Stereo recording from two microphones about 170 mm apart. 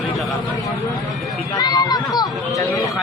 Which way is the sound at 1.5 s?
25° left (ahead or behind).